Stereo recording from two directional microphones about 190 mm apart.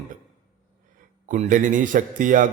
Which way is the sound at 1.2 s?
40° right (ahead or behind).